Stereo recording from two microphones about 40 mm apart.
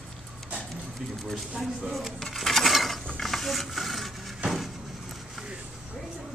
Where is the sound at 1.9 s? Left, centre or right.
Centre.